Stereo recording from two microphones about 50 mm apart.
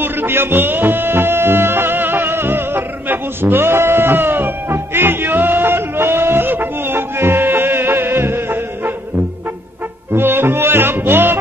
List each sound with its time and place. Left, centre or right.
0.0 s music: right
10.1 s music: right